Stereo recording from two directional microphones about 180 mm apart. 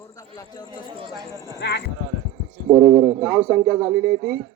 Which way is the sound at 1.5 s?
75° left (ahead or behind).